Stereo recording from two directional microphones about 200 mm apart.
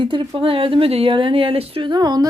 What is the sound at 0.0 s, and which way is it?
Speech, 25° right (ahead or behind).